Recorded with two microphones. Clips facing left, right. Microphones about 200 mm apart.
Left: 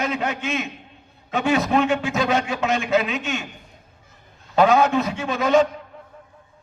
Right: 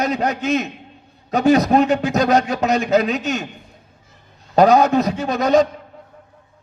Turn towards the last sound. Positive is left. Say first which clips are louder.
# right 3 dB
turn(degrees=-40)  # may be behind; listen again after turning